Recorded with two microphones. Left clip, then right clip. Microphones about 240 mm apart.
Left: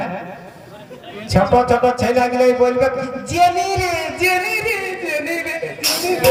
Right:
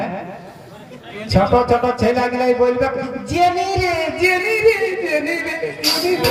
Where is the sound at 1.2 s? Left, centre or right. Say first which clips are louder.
Left 1 dB; left.